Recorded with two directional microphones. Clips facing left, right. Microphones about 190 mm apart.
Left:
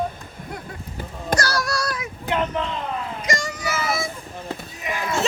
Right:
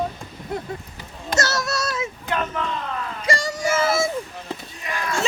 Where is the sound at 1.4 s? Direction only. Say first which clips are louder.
Right 4 dB; 25° right (ahead or behind).